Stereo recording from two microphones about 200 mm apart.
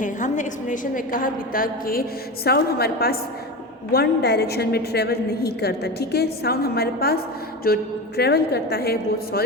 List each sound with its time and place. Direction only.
0.0 s a woman's voice: 40° left (ahead or behind)